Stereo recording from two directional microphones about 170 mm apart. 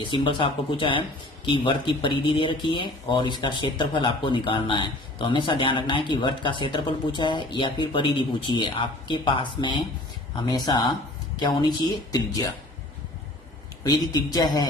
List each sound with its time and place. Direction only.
0.0 s speech: 30° left (ahead or behind)
12.1 s speech: 20° left (ahead or behind)
13.8 s speech: 20° left (ahead or behind)